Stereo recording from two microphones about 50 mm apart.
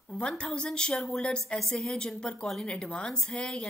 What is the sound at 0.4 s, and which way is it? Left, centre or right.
A woman's voice, centre.